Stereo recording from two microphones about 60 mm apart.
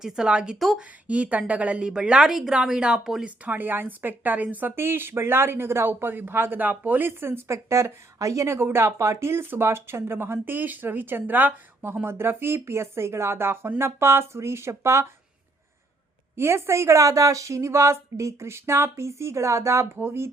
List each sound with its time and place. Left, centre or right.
0.0 s a woman's voice: centre
3.2 s speech: right
4.7 s speech: right
12.0 s a woman's voice: right
16.3 s a woman's voice: right